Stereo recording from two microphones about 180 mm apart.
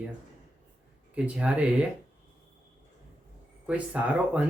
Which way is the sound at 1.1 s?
5° right (ahead or behind).